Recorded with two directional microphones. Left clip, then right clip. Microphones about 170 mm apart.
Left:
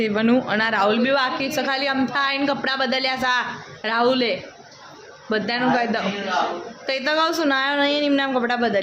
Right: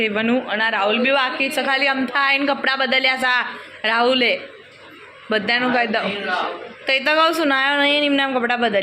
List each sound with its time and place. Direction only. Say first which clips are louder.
0.0 s a woman's voice: right 1 dB; 15° left (ahead or behind)